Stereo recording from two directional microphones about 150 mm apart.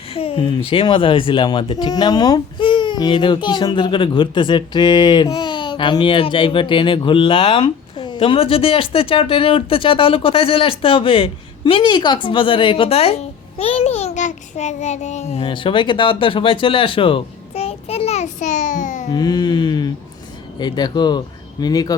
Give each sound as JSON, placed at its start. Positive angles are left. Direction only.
{"t": 0.1, "sound": "speech", "side_deg": 40}
{"t": 19.1, "sound": "speech", "side_deg": 30}